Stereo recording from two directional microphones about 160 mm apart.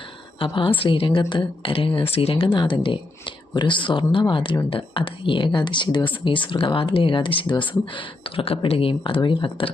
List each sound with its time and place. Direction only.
0.3 s a woman's voice: 35° left (ahead or behind)